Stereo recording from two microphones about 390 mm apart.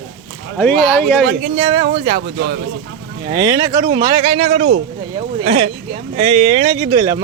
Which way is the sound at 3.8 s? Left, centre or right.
Centre.